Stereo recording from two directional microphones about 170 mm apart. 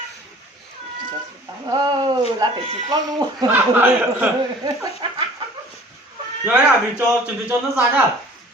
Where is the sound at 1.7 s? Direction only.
25° right (ahead or behind).